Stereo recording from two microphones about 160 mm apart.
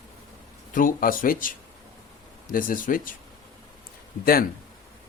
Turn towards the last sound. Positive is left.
turn(degrees=65)  # may be behind; listen again after turning